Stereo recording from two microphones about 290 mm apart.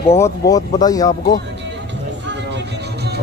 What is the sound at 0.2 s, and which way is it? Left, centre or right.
Speech, centre.